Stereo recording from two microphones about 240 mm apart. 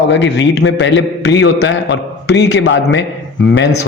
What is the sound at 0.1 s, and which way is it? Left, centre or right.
A man's voice, left.